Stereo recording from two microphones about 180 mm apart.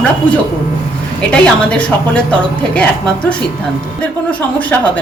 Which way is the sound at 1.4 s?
5° left (ahead or behind).